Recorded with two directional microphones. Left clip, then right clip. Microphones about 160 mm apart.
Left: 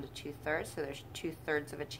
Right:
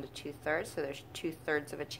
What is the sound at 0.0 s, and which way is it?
Speech, 30° right (ahead or behind).